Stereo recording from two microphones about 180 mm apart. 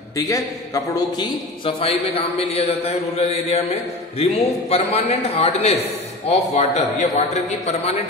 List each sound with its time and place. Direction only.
0.1 s a man's voice: 20° left (ahead or behind)
1.6 s a man's voice: 30° left (ahead or behind)